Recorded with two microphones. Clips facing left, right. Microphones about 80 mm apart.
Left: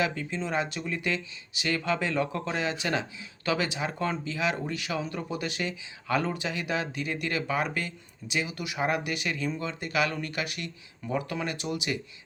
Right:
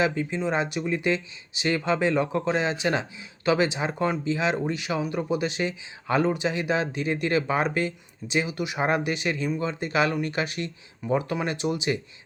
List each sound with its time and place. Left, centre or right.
0.0 s speech: right